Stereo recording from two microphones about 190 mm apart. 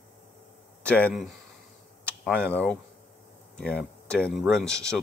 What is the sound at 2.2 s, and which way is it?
Speech, 5° left (ahead or behind).